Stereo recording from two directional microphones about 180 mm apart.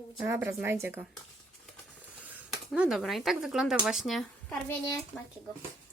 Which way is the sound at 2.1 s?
10° right (ahead or behind).